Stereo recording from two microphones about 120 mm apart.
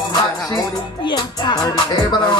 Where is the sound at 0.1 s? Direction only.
30° left (ahead or behind).